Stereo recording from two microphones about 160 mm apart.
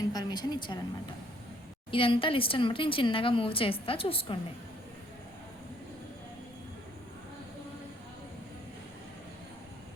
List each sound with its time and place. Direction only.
0.1 s a woman's voice: 25° left (ahead or behind)
1.9 s speech: 35° left (ahead or behind)